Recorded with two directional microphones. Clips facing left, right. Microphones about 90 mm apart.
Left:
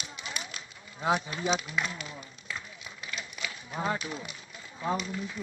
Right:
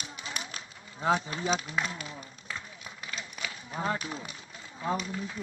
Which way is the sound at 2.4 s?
40° right (ahead or behind).